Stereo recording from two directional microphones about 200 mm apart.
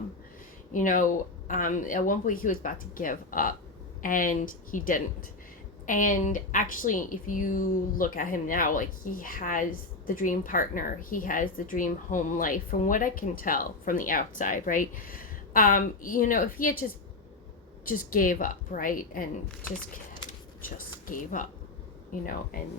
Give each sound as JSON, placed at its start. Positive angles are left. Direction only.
{"t": 0.7, "sound": "a woman's voice", "side_deg": 40}
{"t": 17.8, "sound": "a woman's voice", "side_deg": 45}
{"t": 20.7, "sound": "a woman's voice", "side_deg": 45}
{"t": 22.5, "sound": "a woman's voice", "side_deg": 45}